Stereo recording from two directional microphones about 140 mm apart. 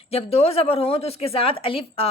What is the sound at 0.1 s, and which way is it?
A woman's voice, 45° left (ahead or behind).